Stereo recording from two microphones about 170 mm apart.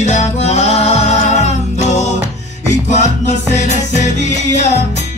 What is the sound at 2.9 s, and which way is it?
Music, 45° left (ahead or behind).